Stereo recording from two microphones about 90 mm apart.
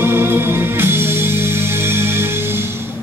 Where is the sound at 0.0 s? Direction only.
25° right (ahead or behind).